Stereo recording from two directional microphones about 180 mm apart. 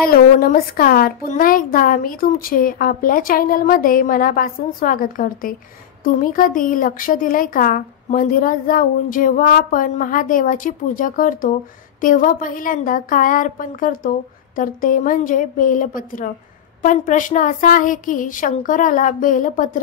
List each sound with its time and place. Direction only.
0.0 s speech: 55° left (ahead or behind)